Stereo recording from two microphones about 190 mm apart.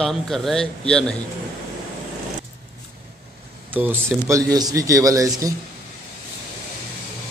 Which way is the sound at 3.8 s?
10° right (ahead or behind).